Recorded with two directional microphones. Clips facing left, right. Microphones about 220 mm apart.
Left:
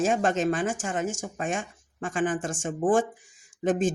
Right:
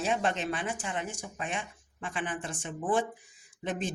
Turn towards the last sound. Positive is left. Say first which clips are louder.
# left 10 dB
turn(degrees=45)  # may be behind; listen again after turning